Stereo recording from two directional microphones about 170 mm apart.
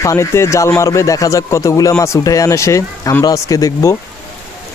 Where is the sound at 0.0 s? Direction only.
15° left (ahead or behind).